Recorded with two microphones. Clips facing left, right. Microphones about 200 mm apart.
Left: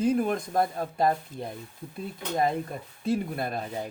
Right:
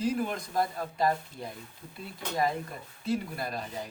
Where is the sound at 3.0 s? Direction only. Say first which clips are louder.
Left 4 dB; 55° left (ahead or behind).